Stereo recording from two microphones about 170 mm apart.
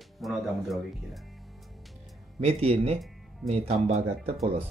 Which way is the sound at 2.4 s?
35° right (ahead or behind).